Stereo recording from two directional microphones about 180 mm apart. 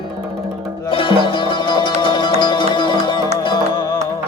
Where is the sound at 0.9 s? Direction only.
30° left (ahead or behind).